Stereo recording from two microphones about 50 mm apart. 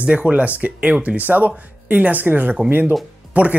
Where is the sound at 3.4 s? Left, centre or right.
Right.